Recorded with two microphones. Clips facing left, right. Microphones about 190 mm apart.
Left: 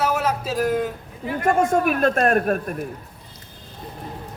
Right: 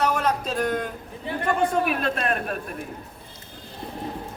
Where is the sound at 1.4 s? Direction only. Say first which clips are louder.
Left 4 dB; 45° left (ahead or behind).